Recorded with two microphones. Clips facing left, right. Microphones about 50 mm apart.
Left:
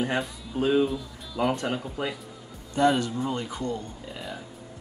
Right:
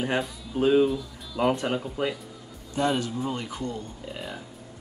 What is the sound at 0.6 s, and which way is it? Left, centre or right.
Speech, centre.